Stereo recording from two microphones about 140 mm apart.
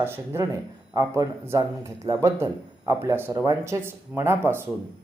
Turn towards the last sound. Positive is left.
turn(degrees=-15)  # may be behind; listen again after turning